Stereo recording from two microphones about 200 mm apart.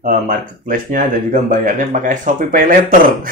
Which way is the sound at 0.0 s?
40° right (ahead or behind).